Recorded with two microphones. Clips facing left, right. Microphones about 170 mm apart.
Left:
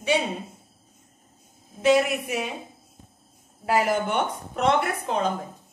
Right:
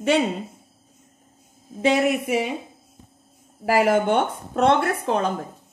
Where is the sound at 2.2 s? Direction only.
70° right (ahead or behind).